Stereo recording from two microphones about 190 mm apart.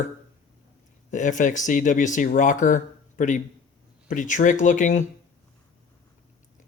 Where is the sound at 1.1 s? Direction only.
40° left (ahead or behind).